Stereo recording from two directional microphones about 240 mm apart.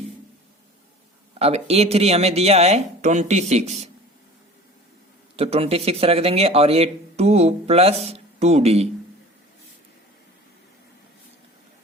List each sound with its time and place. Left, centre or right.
1.4 s speech: right
5.4 s speech: right